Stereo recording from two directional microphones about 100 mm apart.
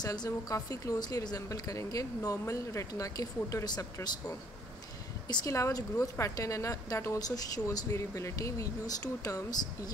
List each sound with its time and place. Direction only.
0.0 s a woman's voice: 40° left (ahead or behind)
5.5 s a woman's voice: 35° left (ahead or behind)